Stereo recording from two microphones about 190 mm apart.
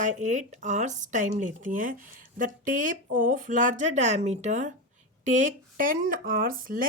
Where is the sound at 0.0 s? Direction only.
40° right (ahead or behind).